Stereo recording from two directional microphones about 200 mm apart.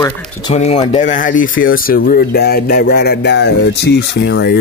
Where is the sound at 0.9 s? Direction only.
40° left (ahead or behind).